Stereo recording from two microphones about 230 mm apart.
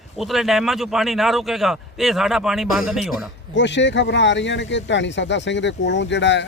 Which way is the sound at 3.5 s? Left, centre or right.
Left.